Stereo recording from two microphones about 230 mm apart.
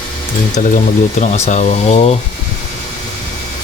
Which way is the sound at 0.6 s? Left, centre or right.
Left.